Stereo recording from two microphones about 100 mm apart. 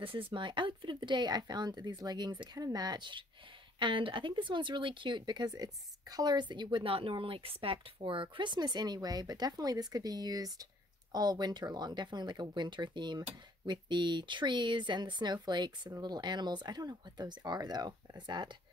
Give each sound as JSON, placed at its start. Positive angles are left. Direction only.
{"t": 0.0, "sound": "speech", "side_deg": -60}